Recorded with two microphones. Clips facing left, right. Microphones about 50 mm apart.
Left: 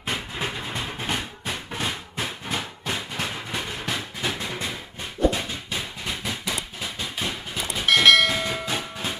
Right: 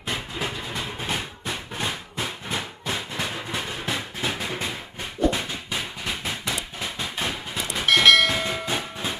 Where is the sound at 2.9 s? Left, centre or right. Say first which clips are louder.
Even; centre.